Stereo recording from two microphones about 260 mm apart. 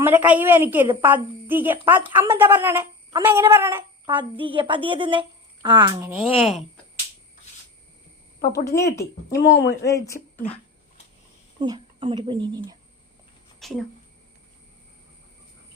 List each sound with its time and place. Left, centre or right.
0.0 s a woman's voice: centre
9.0 s a woman's voice: left
9.6 s speech: centre
10.4 s a sound: left
11.6 s a woman's voice: centre
13.6 s a sound: centre